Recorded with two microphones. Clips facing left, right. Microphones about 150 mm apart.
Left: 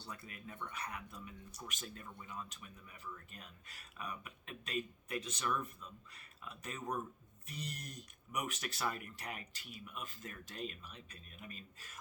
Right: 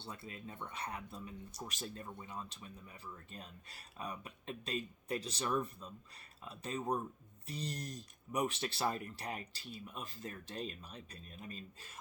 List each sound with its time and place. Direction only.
0.0 s speech: 25° right (ahead or behind)